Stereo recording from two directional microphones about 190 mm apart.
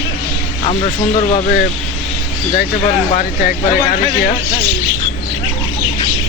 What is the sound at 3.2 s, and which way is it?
Speech, 45° left (ahead or behind).